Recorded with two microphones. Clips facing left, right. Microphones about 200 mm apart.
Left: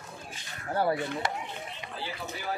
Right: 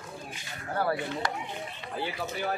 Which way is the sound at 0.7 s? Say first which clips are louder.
Left 1 dB; 25° left (ahead or behind).